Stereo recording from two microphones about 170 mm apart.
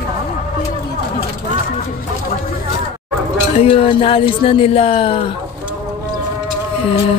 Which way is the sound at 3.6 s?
30° left (ahead or behind).